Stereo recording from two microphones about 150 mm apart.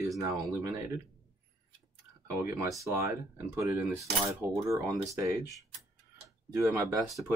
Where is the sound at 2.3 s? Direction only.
15° right (ahead or behind).